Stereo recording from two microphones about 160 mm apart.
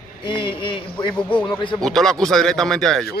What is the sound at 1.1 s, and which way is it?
Speech, 10° left (ahead or behind).